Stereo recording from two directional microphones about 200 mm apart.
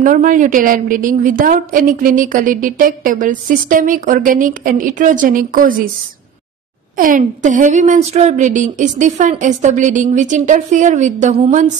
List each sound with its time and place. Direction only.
0.0 s a woman's voice: 40° right (ahead or behind)
7.0 s a woman's voice: 40° right (ahead or behind)